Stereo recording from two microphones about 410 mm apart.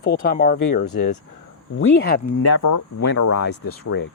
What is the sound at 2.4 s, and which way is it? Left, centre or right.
Speech, left.